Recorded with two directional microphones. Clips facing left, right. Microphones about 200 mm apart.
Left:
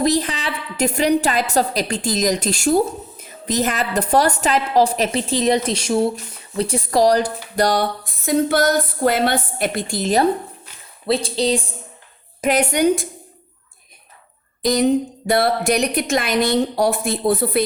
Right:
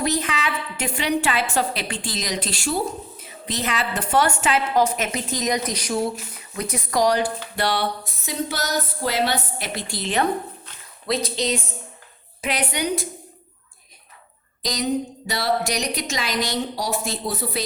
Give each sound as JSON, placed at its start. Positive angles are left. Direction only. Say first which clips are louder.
{"t": 0.0, "sound": "a woman's voice", "louder": "left 5 dB", "side_deg": 35}
{"t": 7.5, "sound": "a sound", "louder": "left 8 dB", "side_deg": 40}
{"t": 9.9, "sound": "a woman's voice", "louder": "left 5 dB", "side_deg": 40}
{"t": 11.0, "sound": "a woman's voice", "louder": "left 5 dB", "side_deg": 30}
{"t": 12.4, "sound": "a sound", "louder": "left 8 dB", "side_deg": 45}
{"t": 14.6, "sound": "a woman's voice", "louder": "left 8 dB", "side_deg": 55}